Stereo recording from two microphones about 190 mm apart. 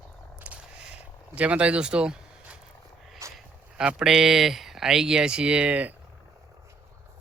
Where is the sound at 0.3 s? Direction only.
5° right (ahead or behind).